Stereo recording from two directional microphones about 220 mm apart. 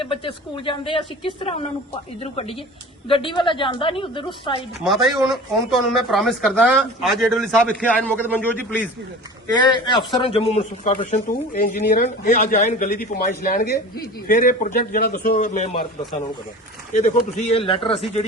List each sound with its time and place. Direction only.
0.0 s a woman's voice: 25° left (ahead or behind)
4.8 s a man's voice: centre (ahead or behind)
9.6 s a woman's voice: 20° left (ahead or behind)
11.5 s a man's voice: 40° left (ahead or behind)
16.9 s a woman's voice: 35° left (ahead or behind)